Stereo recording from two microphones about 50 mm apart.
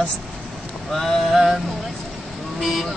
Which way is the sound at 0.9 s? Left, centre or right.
Centre.